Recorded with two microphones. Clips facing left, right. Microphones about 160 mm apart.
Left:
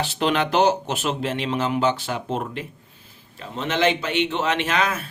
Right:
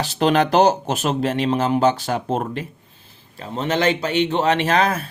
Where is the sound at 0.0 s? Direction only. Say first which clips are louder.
Right 4 dB; 40° right (ahead or behind).